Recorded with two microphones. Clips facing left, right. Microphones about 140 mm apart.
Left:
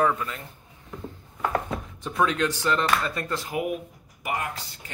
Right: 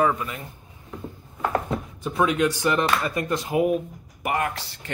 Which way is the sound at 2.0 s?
10° right (ahead or behind).